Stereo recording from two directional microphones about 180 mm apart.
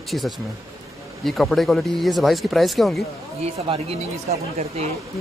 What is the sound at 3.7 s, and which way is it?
Speech, 35° right (ahead or behind).